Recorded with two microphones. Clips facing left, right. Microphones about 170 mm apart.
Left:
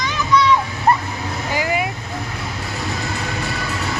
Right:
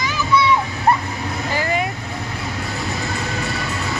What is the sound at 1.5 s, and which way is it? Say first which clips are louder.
Vehicle: left 1 dB; 10° left (ahead or behind).